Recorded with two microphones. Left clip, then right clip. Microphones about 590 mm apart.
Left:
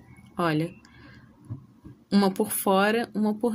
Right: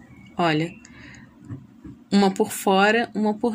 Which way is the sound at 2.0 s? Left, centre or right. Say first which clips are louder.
Right 4 dB; left.